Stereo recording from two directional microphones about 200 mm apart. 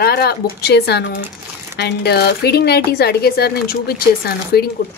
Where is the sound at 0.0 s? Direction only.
50° left (ahead or behind).